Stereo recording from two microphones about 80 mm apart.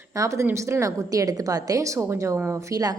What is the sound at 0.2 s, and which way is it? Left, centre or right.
A woman's voice, right.